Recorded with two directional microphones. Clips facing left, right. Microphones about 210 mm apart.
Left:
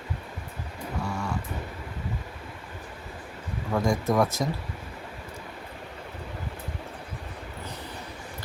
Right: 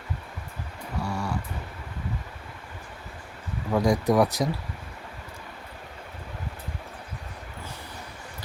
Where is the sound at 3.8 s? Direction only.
15° right (ahead or behind).